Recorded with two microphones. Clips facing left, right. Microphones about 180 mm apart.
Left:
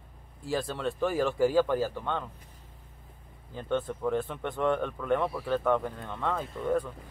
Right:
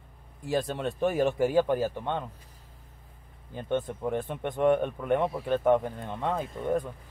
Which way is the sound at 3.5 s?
15° right (ahead or behind).